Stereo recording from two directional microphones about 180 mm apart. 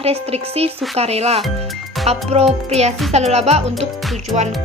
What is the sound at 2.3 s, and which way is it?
A woman's voice, 35° right (ahead or behind).